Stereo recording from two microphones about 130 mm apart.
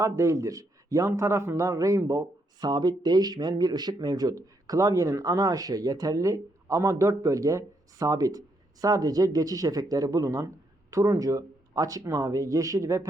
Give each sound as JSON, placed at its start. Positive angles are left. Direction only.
{"t": 0.0, "sound": "speech", "side_deg": -25}